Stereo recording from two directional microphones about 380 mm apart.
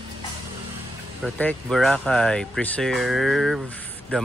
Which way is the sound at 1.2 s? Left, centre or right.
Centre.